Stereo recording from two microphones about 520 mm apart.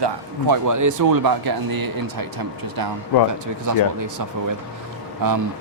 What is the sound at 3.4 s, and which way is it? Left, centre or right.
Speech, right.